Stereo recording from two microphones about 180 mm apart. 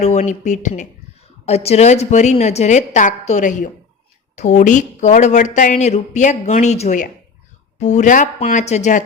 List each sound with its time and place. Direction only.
0.0 s speech: 40° left (ahead or behind)